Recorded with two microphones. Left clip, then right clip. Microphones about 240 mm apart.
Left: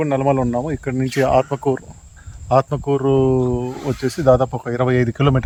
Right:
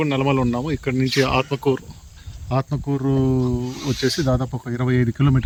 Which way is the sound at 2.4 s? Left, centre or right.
Left.